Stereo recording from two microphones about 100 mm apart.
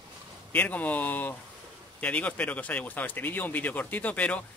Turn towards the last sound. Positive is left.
turn(degrees=15)  # may be behind; listen again after turning